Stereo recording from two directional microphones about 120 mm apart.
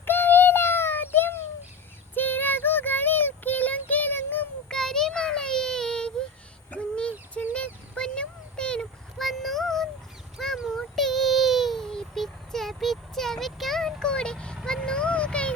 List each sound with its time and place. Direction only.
0.0 s child singing: 15° left (ahead or behind)
4.7 s child singing: 5° left (ahead or behind)
6.7 s a sound: 10° left (ahead or behind)
10.3 s child singing: centre (ahead or behind)